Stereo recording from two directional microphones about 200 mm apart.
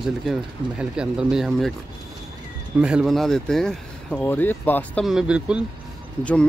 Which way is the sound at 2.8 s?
5° right (ahead or behind).